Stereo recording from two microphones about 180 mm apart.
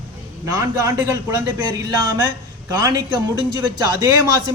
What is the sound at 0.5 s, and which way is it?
A man's voice, 20° right (ahead or behind).